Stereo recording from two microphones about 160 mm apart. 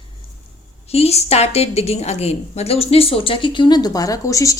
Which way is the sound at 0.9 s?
40° left (ahead or behind).